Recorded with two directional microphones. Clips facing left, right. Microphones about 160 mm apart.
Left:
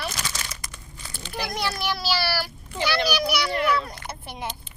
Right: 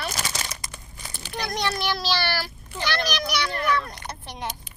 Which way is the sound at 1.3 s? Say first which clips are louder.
Right 1 dB; 5° left (ahead or behind).